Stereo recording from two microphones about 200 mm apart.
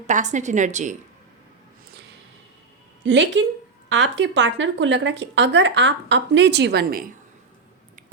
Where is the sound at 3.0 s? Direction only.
65° right (ahead or behind).